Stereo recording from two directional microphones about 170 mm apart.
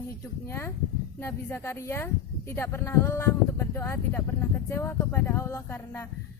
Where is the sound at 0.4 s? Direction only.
15° left (ahead or behind).